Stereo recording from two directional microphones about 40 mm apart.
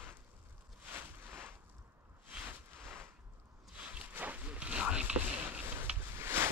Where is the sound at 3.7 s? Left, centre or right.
Right.